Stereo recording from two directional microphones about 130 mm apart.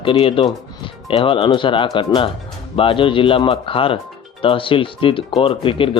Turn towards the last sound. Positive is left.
turn(degrees=40)  # may be behind; listen again after turning